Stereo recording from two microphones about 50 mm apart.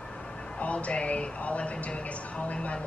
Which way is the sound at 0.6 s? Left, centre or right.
Left.